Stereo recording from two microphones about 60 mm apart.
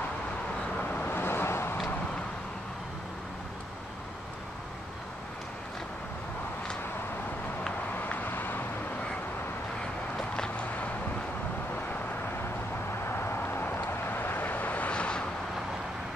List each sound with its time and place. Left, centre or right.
0.7 s vehicle: left
8.0 s vehicle: left
10.3 s a sound: centre
13.0 s vehicle: left; by 15.2 s centre